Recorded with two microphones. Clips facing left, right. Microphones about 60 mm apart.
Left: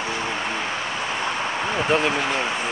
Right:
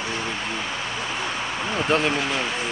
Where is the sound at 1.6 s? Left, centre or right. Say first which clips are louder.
Even; centre.